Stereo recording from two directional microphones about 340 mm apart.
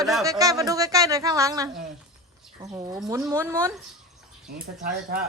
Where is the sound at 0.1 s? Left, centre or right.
Centre.